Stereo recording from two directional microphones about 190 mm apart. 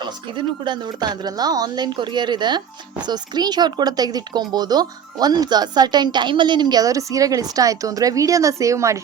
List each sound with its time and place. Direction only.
0.0 s speech: 25° right (ahead or behind)